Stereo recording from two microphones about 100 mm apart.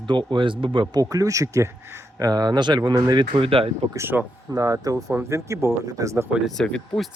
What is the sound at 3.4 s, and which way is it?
Speech, 65° right (ahead or behind).